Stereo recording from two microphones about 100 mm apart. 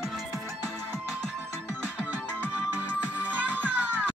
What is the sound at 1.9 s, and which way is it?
Music, 15° right (ahead or behind).